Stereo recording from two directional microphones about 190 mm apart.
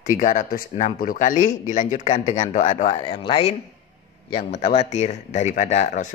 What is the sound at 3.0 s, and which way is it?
Speech, 30° left (ahead or behind).